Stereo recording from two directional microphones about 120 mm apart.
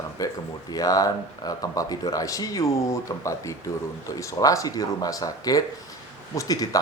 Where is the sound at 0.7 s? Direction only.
30° left (ahead or behind).